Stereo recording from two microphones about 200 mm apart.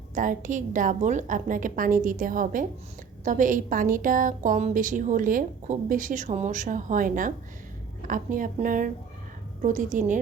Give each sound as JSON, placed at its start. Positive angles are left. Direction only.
{"t": 0.1, "sound": "a woman's voice", "side_deg": -40}